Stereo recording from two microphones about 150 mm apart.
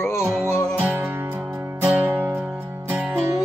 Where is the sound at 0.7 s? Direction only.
15° right (ahead or behind).